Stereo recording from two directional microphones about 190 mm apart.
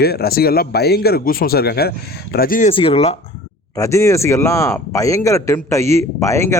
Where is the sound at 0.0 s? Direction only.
55° left (ahead or behind).